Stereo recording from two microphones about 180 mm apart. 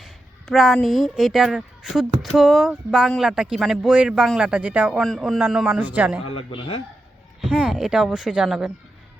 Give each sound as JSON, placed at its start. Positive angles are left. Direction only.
{"t": 0.0, "sound": "speech", "side_deg": 0}
{"t": 6.3, "sound": "speech", "side_deg": 30}
{"t": 7.4, "sound": "speech", "side_deg": -5}